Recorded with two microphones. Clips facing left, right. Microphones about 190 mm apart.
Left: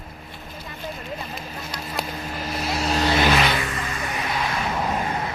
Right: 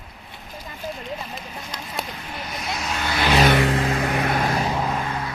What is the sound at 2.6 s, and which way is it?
Vehicle, 30° left (ahead or behind).